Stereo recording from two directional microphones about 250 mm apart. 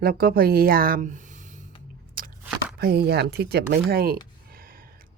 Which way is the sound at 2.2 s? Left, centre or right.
Right.